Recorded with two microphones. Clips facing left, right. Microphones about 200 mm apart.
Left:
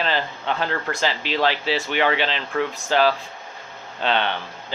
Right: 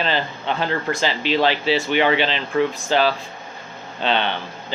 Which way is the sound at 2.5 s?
10° right (ahead or behind).